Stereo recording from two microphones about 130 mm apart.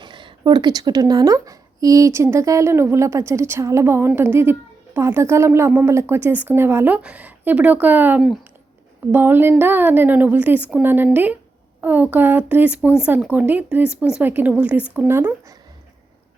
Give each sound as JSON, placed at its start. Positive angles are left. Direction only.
{"t": 0.0, "sound": "a woman's voice", "side_deg": -40}